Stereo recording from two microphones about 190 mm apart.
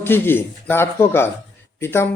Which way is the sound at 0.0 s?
10° left (ahead or behind).